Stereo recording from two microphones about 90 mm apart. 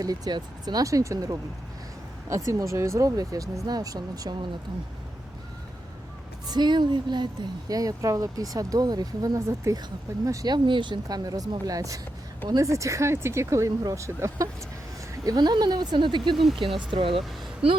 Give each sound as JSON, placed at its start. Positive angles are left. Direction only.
{"t": 0.0, "sound": "speech", "side_deg": -50}
{"t": 6.5, "sound": "speech", "side_deg": -55}
{"t": 7.7, "sound": "speech", "side_deg": -40}
{"t": 11.3, "sound": "speech", "side_deg": -40}
{"t": 15.2, "sound": "speech", "side_deg": -45}
{"t": 16.3, "sound": "speech", "side_deg": 0}
{"t": 16.7, "sound": "speech", "side_deg": -75}